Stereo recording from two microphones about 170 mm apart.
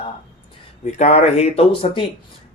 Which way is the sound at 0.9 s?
40° left (ahead or behind).